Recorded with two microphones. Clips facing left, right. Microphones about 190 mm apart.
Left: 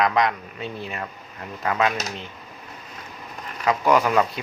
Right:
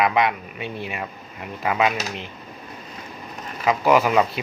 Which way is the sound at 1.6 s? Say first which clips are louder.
Right 1 dB; 15° right (ahead or behind).